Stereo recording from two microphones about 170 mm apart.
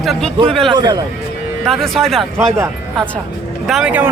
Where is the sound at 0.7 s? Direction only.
25° right (ahead or behind).